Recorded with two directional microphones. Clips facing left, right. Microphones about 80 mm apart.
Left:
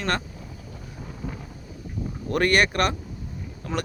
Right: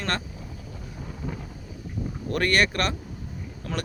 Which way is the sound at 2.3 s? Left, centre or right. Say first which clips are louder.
Left 2 dB; left.